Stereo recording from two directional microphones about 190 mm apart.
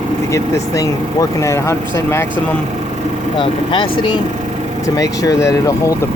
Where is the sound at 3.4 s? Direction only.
25° left (ahead or behind).